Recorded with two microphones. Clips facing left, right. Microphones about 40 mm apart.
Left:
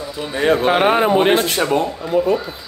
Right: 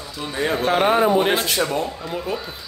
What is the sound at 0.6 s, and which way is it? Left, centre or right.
Speech, left.